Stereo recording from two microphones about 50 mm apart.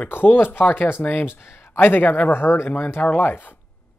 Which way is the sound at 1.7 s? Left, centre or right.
Left.